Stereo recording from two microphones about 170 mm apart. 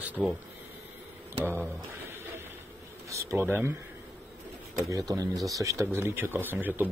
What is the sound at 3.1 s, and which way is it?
Speech, 15° right (ahead or behind).